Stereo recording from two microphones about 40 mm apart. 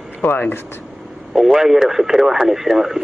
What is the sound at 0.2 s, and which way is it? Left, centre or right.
Speech, left.